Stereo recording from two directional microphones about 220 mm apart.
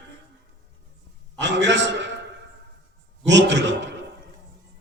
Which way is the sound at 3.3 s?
55° right (ahead or behind).